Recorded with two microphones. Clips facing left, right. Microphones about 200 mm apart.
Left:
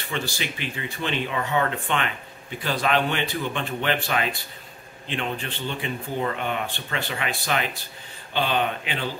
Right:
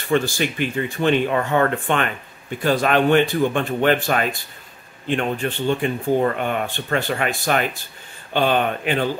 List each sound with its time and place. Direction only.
0.1 s speech: 50° right (ahead or behind)